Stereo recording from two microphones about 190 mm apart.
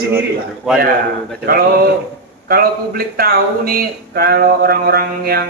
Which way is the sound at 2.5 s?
50° right (ahead or behind).